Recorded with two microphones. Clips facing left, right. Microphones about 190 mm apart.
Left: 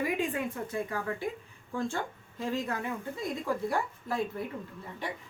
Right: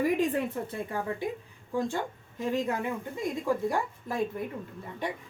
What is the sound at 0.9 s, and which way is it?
Speech, 20° right (ahead or behind).